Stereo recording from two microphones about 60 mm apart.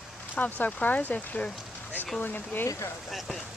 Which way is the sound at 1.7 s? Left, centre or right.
Left.